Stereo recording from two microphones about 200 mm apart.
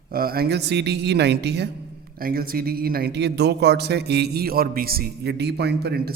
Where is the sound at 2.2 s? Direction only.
45° right (ahead or behind).